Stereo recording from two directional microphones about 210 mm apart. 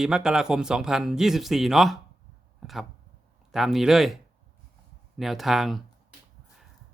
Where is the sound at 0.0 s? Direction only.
5° right (ahead or behind).